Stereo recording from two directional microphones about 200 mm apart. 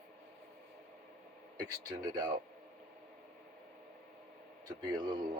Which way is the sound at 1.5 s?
20° right (ahead or behind).